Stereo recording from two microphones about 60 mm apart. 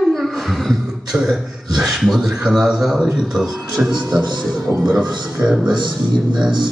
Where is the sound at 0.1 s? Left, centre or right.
Centre.